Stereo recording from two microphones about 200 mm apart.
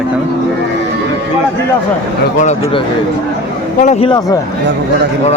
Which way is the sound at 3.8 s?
35° left (ahead or behind).